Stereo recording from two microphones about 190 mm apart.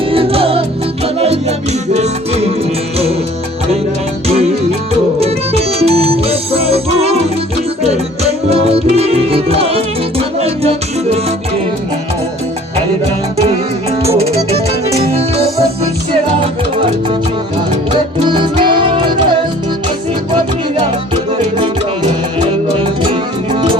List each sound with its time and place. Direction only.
0.1 s music: 30° right (ahead or behind)
5.2 s music: 30° right (ahead or behind)
8.4 s music: 30° right (ahead or behind)
18.3 s music: 25° right (ahead or behind)
21.6 s music: 25° right (ahead or behind)